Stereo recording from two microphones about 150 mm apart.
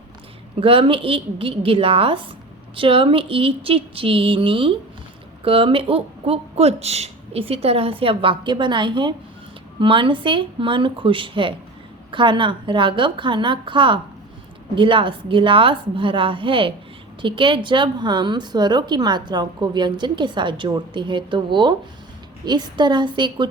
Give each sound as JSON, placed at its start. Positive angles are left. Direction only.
{"t": 0.6, "sound": "a woman's voice", "side_deg": -35}